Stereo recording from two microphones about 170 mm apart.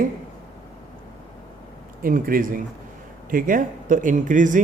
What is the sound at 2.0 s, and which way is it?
A man's voice, 55° right (ahead or behind).